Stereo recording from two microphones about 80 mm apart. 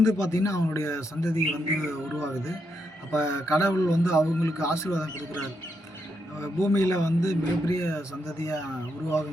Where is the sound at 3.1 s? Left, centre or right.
Left.